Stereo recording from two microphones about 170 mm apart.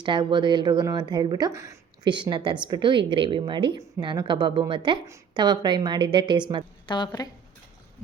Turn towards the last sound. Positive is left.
turn(degrees=25)  # may be behind; listen again after turning